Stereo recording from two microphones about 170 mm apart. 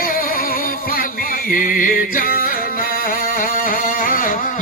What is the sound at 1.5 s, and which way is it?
Music, 50° left (ahead or behind).